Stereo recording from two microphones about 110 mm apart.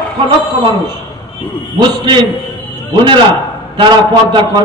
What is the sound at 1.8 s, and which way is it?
Speech, 45° right (ahead or behind).